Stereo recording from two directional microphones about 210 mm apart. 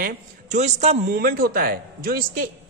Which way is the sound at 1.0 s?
45° right (ahead or behind).